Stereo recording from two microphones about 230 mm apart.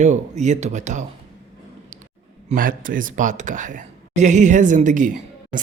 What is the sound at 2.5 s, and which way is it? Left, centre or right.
Speech, right.